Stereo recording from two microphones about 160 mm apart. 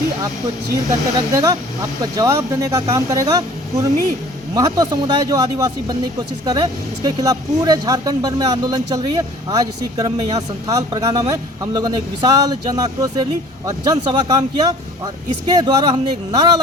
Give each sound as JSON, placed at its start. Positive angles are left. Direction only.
{"t": 0.9, "sound": "speech", "side_deg": -20}
{"t": 4.5, "sound": "speech", "side_deg": -25}